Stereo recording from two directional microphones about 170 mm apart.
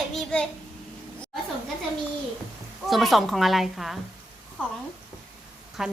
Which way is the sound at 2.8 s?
Centre (ahead or behind).